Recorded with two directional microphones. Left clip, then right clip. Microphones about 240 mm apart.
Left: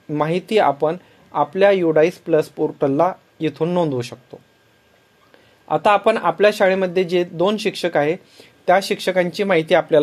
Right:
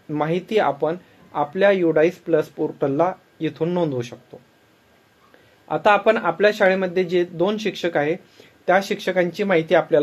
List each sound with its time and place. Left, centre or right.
0.1 s speech: left
5.7 s speech: left